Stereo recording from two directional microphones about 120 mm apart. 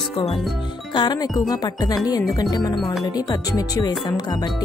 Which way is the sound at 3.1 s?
35° left (ahead or behind).